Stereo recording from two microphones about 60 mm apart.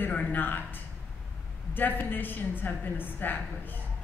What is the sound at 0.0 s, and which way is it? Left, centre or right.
A man's voice, left.